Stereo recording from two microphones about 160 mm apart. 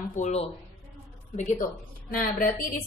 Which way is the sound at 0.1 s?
45° left (ahead or behind).